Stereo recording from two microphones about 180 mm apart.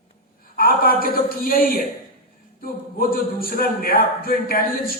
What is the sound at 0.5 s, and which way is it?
A man's voice, 55° left (ahead or behind).